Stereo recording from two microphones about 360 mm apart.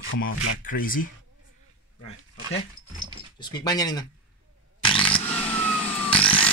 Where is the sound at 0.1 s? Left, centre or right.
Left.